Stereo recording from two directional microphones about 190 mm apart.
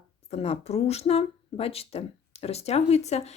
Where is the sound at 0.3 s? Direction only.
35° left (ahead or behind).